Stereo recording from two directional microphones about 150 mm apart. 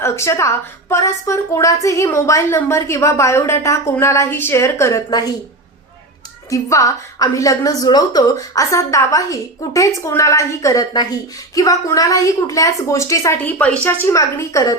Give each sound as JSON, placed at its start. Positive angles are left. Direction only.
{"t": 0.0, "sound": "a woman's voice", "side_deg": 20}
{"t": 6.5, "sound": "a woman's voice", "side_deg": 20}